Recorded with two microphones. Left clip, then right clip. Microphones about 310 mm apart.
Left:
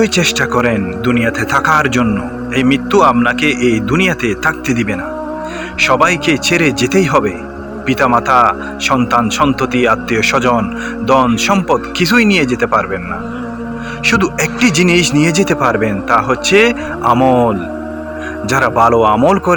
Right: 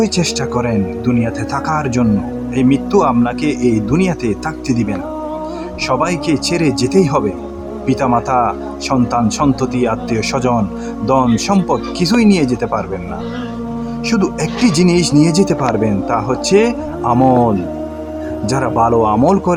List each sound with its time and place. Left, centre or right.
0.0 s speech: right
14.2 s speech: right
18.5 s speech: right